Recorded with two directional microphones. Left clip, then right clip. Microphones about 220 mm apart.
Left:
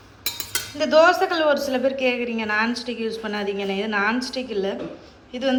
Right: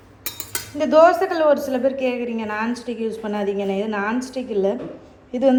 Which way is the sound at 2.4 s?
25° left (ahead or behind).